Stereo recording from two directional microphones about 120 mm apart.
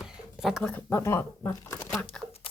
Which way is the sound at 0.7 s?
20° left (ahead or behind).